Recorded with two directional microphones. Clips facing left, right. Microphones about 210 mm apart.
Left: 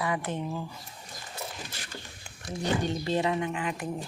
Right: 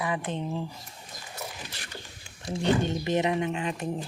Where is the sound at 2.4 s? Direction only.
20° right (ahead or behind).